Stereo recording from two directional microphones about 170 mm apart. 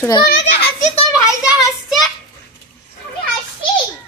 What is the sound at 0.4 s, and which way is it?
Children playing, 40° left (ahead or behind).